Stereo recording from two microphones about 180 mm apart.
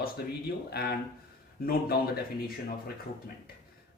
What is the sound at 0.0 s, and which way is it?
Speech, 60° left (ahead or behind).